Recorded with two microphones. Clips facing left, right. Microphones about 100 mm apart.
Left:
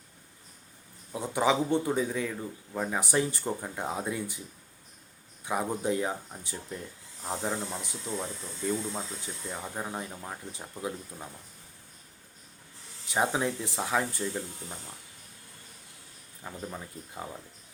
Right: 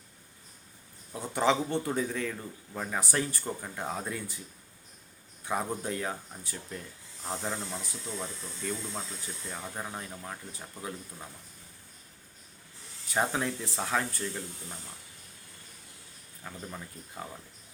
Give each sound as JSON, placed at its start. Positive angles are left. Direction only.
{"t": 1.1, "sound": "speech", "side_deg": 15}
{"t": 5.5, "sound": "speech", "side_deg": 15}
{"t": 13.1, "sound": "speech", "side_deg": 15}
{"t": 16.4, "sound": "speech", "side_deg": 15}